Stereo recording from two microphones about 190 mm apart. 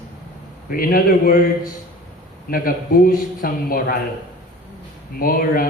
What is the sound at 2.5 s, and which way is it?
A man's voice, 50° left (ahead or behind).